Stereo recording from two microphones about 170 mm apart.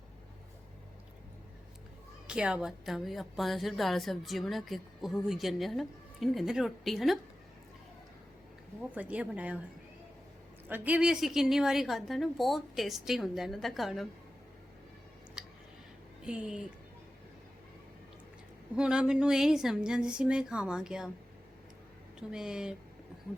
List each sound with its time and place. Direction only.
2.2 s a woman's voice: 5° right (ahead or behind)
9.0 s a woman's voice: 10° right (ahead or behind)
10.7 s a woman's voice: 10° right (ahead or behind)
15.4 s tick: 5° right (ahead or behind)
16.2 s a woman's voice: 5° right (ahead or behind)
18.8 s a woman's voice: 5° right (ahead or behind)
22.3 s a woman's voice: 5° right (ahead or behind)